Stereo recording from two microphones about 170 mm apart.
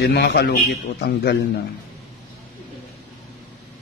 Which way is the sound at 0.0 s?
75° left (ahead or behind).